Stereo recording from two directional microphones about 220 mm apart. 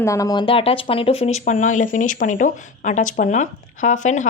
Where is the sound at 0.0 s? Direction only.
15° left (ahead or behind).